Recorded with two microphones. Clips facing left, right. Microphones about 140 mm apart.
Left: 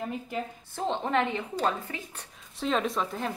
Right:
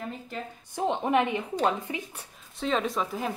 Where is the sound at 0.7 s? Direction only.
15° right (ahead or behind).